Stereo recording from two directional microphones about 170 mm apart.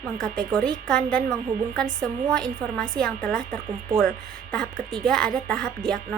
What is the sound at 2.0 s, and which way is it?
A woman's voice, 5° left (ahead or behind).